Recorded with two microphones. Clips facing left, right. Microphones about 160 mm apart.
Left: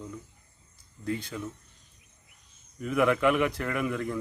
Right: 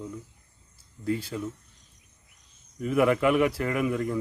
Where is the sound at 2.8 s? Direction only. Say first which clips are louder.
Right 2 dB; 5° right (ahead or behind).